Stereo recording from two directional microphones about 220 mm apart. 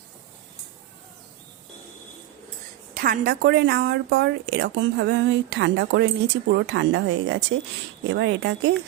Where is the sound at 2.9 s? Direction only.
40° right (ahead or behind).